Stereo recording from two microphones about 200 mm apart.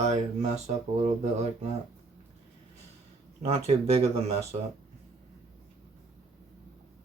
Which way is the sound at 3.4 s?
30° right (ahead or behind).